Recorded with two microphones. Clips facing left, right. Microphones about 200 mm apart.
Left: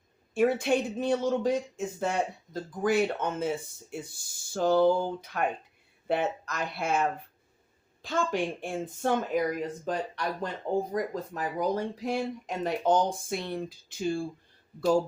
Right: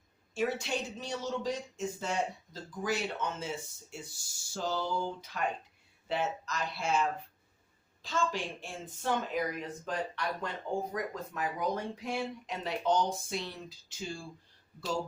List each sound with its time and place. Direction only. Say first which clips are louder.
0.3 s speech: left 8 dB; 55° left (ahead or behind)